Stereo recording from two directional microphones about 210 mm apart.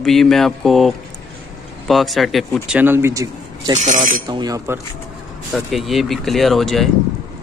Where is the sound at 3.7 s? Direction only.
35° right (ahead or behind).